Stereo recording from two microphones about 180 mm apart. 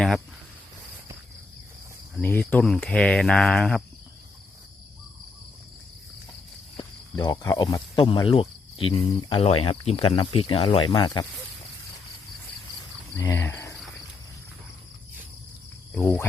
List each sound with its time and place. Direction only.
2.2 s speech: 10° left (ahead or behind)
6.7 s speech: 20° left (ahead or behind)
7.9 s speech: 30° left (ahead or behind)
13.1 s speech: 15° left (ahead or behind)
16.0 s speech: 15° left (ahead or behind)